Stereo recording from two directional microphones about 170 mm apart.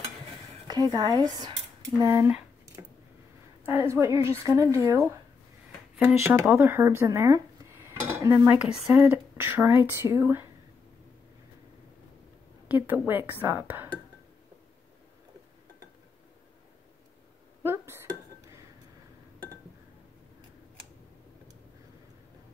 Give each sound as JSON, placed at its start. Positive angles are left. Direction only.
{"t": 0.7, "sound": "speech", "side_deg": -20}
{"t": 3.6, "sound": "speech", "side_deg": -15}
{"t": 8.0, "sound": "dishes", "side_deg": -20}
{"t": 8.8, "sound": "speech", "side_deg": -15}
{"t": 12.6, "sound": "speech", "side_deg": -10}
{"t": 17.6, "sound": "chink", "side_deg": -15}